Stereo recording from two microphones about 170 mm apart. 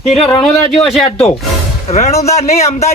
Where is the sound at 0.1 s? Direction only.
30° left (ahead or behind).